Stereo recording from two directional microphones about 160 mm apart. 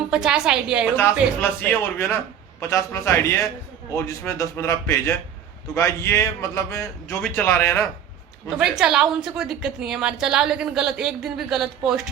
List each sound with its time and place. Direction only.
0.1 s a woman's voice: 5° right (ahead or behind)
1.4 s a man's voice: 15° left (ahead or behind)
8.4 s a woman's voice: 5° right (ahead or behind)